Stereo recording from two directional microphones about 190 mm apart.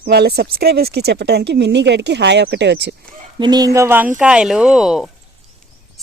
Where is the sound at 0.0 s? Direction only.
60° right (ahead or behind).